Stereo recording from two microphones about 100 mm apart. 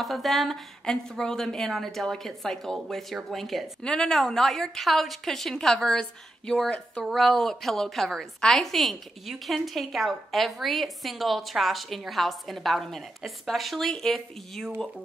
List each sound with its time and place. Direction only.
0.0 s a woman's voice: centre (ahead or behind)